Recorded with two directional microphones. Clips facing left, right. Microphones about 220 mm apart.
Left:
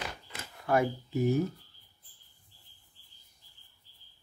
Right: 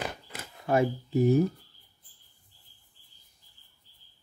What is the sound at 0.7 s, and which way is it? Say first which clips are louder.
Speech: right 2 dB; 25° right (ahead or behind).